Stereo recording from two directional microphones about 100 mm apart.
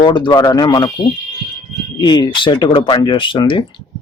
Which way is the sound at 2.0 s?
50° left (ahead or behind).